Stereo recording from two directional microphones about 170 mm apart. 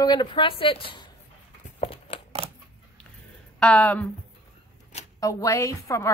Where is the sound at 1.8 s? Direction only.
30° left (ahead or behind).